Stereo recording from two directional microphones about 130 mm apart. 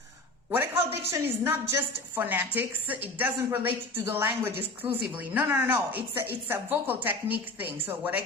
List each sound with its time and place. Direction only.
0.5 s a woman's voice: 15° right (ahead or behind)